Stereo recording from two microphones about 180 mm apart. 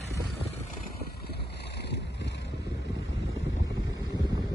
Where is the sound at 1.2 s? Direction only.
65° left (ahead or behind); by 3.6 s 90° left.